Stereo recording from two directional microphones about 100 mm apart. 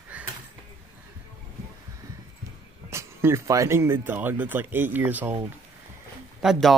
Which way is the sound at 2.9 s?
25° right (ahead or behind).